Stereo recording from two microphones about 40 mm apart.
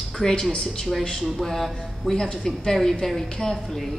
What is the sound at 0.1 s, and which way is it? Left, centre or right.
A woman's voice, centre.